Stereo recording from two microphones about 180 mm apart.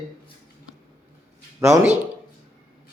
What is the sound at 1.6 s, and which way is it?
Speech, 15° right (ahead or behind).